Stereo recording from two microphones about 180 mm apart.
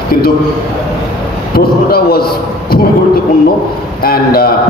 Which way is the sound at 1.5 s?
60° left (ahead or behind).